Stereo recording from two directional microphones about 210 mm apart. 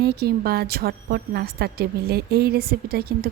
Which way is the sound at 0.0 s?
50° right (ahead or behind).